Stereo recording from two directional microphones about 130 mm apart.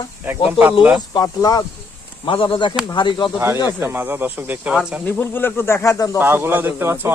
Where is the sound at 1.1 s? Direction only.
30° left (ahead or behind).